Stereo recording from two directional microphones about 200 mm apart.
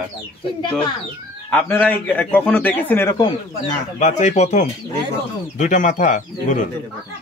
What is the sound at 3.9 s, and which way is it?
Speech, 35° left (ahead or behind).